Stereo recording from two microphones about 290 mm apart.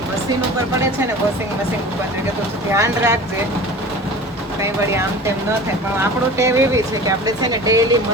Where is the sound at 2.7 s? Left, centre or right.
Centre.